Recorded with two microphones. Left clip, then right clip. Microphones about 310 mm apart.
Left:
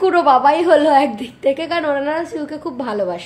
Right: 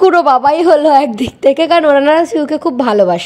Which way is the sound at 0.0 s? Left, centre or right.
Right.